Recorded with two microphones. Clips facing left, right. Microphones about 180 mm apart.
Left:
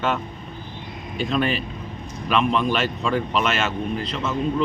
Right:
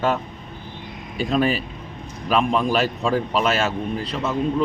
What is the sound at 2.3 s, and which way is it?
A man's voice, 40° right (ahead or behind).